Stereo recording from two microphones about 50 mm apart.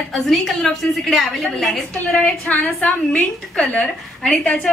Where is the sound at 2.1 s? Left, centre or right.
Left.